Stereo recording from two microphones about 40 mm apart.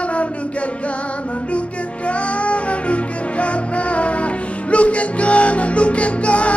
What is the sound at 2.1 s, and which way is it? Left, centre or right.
Music, left.